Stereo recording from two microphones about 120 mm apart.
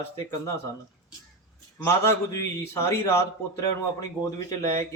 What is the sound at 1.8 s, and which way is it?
A man's voice, 25° left (ahead or behind).